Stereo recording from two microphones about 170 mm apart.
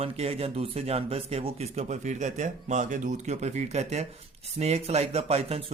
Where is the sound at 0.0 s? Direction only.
35° right (ahead or behind).